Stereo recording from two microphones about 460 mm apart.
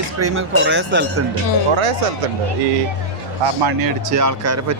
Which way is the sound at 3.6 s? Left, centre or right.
Right.